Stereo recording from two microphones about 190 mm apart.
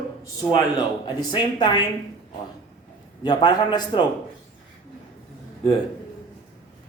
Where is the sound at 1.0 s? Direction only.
25° left (ahead or behind).